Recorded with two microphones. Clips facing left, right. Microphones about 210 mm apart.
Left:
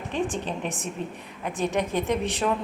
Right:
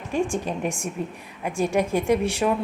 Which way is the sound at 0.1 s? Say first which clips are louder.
Right 4 dB; 10° right (ahead or behind).